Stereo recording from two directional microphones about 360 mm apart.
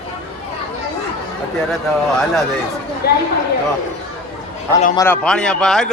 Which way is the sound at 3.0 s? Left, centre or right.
Left.